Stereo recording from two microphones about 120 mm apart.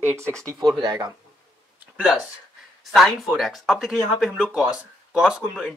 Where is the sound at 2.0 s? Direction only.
5° right (ahead or behind).